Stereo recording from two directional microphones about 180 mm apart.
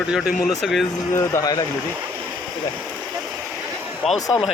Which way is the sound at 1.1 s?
15° left (ahead or behind).